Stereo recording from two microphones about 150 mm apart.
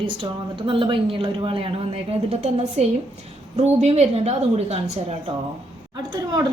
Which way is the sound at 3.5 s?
45° right (ahead or behind).